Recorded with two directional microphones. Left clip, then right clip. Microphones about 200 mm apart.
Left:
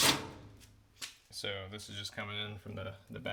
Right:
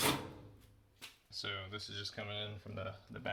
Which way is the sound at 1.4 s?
30° left (ahead or behind).